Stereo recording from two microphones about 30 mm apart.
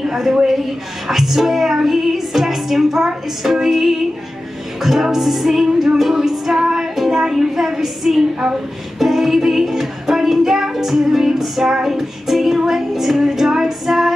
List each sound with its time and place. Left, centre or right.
0.0 s a woman's voice: centre
1.0 s music: centre
7.1 s speech: centre
7.3 s music: centre
9.0 s female singing: centre
11.4 s music: centre